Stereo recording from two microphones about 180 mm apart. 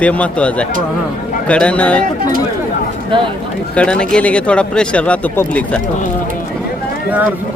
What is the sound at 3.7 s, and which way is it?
Speech, 5° left (ahead or behind).